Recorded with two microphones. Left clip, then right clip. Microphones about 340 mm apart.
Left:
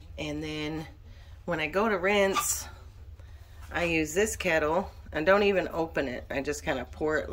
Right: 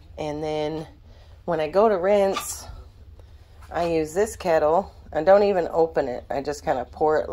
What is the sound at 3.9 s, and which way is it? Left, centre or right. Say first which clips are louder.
Speech: right 3 dB; centre.